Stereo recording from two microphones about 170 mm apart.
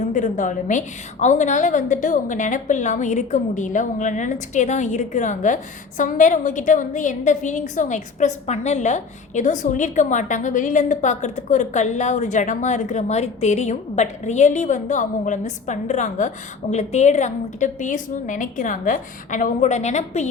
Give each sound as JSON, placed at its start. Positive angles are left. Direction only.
{"t": 0.1, "sound": "a woman's voice", "side_deg": 45}